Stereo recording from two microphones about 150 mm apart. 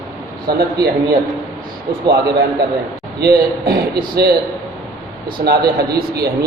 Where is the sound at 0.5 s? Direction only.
90° right.